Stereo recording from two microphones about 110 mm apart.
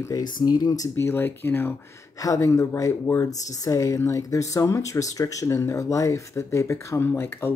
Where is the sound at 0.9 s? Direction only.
20° left (ahead or behind).